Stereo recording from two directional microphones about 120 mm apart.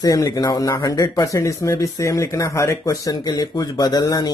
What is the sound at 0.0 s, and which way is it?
Speech, 30° left (ahead or behind).